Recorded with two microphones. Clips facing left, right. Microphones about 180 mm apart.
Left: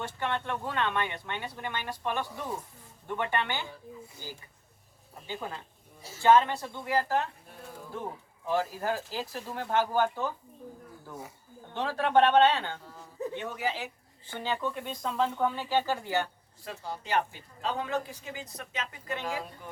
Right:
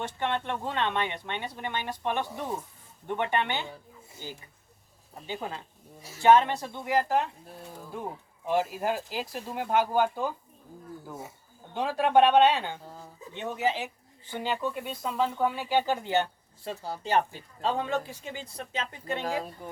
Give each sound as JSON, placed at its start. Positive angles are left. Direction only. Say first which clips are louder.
{"t": 0.0, "sound": "speech", "louder": "right 2 dB", "side_deg": -20}
{"t": 8.4, "sound": "speech", "louder": "right 2 dB", "side_deg": -15}
{"t": 11.7, "sound": "speech", "louder": "right 2 dB", "side_deg": -15}
{"t": 13.3, "sound": "speech", "louder": "right 7 dB", "side_deg": -25}
{"t": 14.3, "sound": "speech", "louder": "right 2 dB", "side_deg": -10}
{"t": 16.8, "sound": "speech", "louder": "right 3 dB", "side_deg": -35}